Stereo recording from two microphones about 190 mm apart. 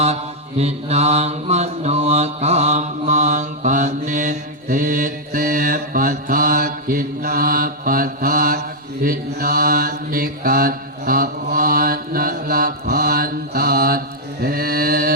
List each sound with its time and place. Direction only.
0.6 s mantra: 35° right (ahead or behind); by 15.1 s 50° right (ahead or behind)